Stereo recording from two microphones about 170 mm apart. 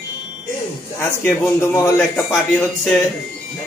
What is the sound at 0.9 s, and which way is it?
A man's voice, 15° left (ahead or behind).